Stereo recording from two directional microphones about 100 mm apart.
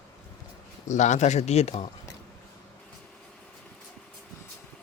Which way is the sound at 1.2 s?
90° left.